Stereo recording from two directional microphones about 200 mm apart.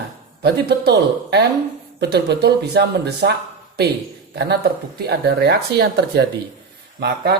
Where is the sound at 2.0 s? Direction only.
55° right (ahead or behind).